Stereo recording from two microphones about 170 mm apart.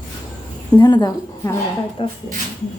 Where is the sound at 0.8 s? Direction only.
25° left (ahead or behind).